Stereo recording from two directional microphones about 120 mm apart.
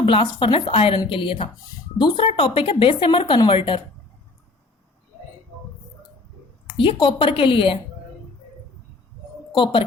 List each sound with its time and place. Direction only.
0.0 s speech: 45° left (ahead or behind)
6.7 s speech: 45° left (ahead or behind)
9.5 s speech: 45° left (ahead or behind)